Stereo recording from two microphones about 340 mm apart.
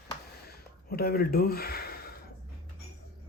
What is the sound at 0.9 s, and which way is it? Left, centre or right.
Speech, left.